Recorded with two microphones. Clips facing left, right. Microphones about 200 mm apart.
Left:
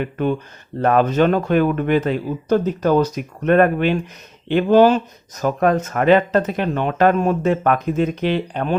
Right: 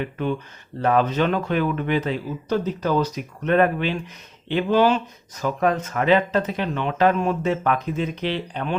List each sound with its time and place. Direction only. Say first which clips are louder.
0.0 s speech: left 4 dB; 50° left (ahead or behind)